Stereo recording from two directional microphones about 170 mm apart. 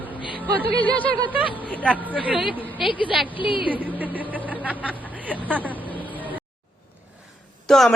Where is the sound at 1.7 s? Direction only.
5° left (ahead or behind).